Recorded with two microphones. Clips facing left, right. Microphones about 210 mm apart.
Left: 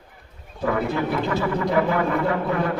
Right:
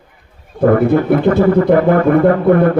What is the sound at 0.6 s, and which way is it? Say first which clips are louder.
A man's voice: right 12 dB; 55° right (ahead or behind).